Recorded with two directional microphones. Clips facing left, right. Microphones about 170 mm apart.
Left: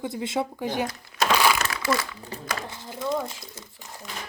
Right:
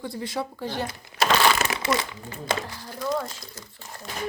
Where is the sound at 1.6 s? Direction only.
25° right (ahead or behind).